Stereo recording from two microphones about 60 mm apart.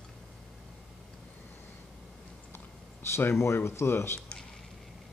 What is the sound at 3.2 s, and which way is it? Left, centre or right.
Speech, left.